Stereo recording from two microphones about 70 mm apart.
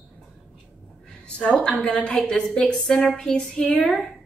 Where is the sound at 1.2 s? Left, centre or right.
Centre.